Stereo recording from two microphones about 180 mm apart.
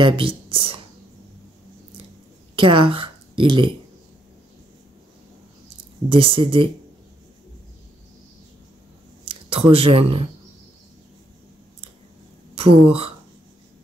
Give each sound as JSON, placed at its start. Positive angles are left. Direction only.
{"t": 0.0, "sound": "speech", "side_deg": -30}
{"t": 2.5, "sound": "speech", "side_deg": -30}
{"t": 6.0, "sound": "speech", "side_deg": -30}
{"t": 9.2, "sound": "speech", "side_deg": -30}
{"t": 12.6, "sound": "speech", "side_deg": -30}